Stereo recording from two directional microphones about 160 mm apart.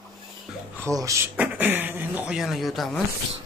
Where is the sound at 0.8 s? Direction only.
20° right (ahead or behind).